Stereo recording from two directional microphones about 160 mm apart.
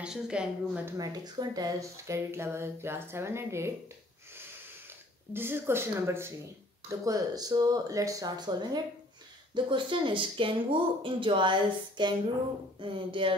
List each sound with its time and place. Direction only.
0.0 s a woman's voice: 5° right (ahead or behind)
0.9 s speech: 25° right (ahead or behind)
5.3 s speech: 15° right (ahead or behind); by 13.4 s 30° right (ahead or behind)